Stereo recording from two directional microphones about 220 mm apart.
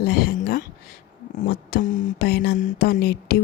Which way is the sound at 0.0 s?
45° left (ahead or behind).